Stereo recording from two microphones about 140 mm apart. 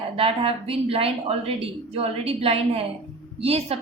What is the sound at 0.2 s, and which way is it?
A woman's voice, 40° right (ahead or behind).